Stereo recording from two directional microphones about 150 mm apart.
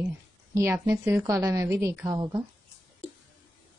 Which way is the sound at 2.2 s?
30° right (ahead or behind).